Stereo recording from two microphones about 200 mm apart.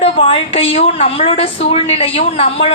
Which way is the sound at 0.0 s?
30° left (ahead or behind).